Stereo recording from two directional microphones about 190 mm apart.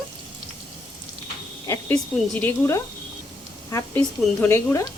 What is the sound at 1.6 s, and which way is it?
Speech, 15° left (ahead or behind).